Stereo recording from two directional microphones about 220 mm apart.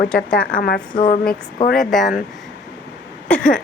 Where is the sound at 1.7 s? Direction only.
Centre (ahead or behind).